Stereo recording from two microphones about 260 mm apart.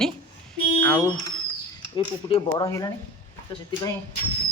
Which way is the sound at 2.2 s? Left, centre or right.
Centre.